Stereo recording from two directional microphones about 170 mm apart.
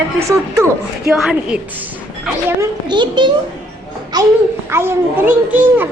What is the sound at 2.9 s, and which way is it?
A child's voice, 25° right (ahead or behind).